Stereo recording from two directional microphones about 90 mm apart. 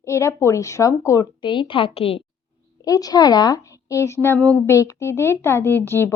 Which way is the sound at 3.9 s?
35° left (ahead or behind).